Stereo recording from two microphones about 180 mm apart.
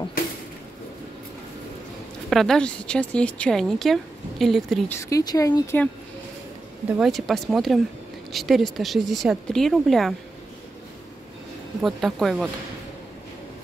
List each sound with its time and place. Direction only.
2.2 s speech: centre (ahead or behind)
4.9 s speech: 20° left (ahead or behind)
7.0 s speech: centre (ahead or behind)
11.8 s speech: centre (ahead or behind)